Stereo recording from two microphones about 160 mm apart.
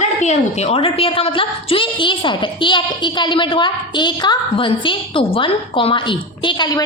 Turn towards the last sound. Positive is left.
turn(degrees=25)  # may be behind; listen again after turning